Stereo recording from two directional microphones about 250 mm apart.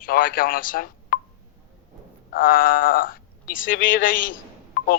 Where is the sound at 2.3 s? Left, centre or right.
Left.